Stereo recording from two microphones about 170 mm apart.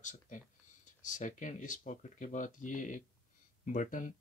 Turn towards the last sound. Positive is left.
turn(degrees=50)  # may be behind; listen again after turning